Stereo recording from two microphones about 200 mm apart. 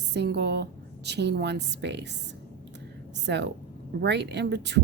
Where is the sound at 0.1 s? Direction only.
55° right (ahead or behind).